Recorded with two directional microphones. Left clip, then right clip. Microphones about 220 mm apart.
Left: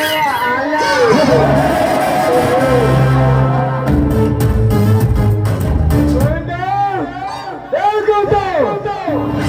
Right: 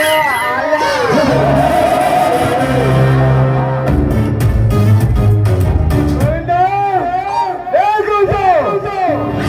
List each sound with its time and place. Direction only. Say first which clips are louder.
0.0 s children playing: right 3 dB; 25° left (ahead or behind)
0.8 s music: left 1 dB; 25° left (ahead or behind)